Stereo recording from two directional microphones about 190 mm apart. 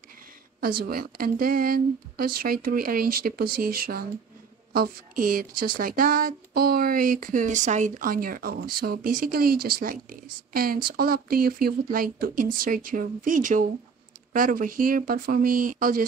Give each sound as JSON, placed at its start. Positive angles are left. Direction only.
{"t": 0.6, "sound": "speech", "side_deg": -50}